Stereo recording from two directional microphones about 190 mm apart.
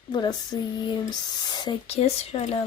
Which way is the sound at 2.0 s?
35° left (ahead or behind).